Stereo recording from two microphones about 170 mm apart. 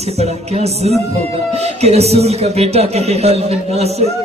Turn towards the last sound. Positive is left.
turn(degrees=-40)  # may be behind; listen again after turning